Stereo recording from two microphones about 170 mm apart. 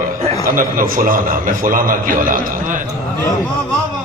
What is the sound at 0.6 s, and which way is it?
A man's voice, 55° right (ahead or behind).